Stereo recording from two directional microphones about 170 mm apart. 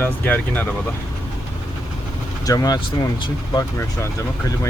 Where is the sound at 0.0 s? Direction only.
10° left (ahead or behind).